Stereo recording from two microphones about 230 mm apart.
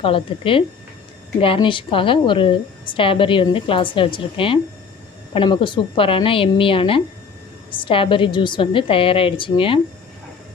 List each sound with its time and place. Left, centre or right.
0.0 s a woman's voice: left